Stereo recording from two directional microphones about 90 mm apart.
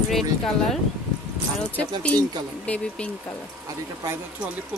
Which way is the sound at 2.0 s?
15° left (ahead or behind).